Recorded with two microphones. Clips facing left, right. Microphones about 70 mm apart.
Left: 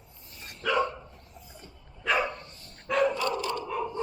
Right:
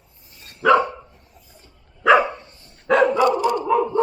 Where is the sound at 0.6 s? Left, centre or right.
Right.